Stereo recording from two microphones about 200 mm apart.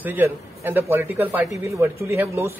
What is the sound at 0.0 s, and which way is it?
A man's voice, 10° right (ahead or behind).